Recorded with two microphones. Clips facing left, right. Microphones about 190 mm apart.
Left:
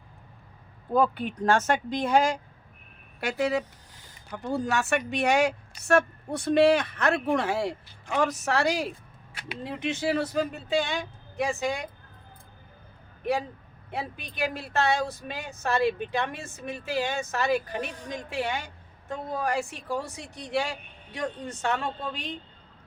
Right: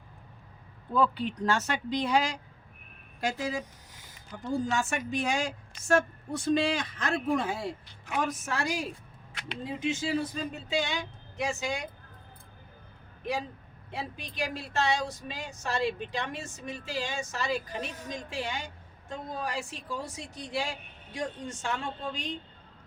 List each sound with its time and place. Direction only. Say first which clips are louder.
0.9 s speech: left 3 dB; 50° left (ahead or behind)
3.2 s a woman's voice: left 5 dB; 65° left (ahead or behind)
13.9 s a woman's voice: left 3 dB; 55° left (ahead or behind)